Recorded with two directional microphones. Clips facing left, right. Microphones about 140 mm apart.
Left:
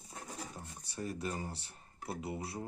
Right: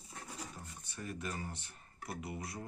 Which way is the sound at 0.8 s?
35° left (ahead or behind).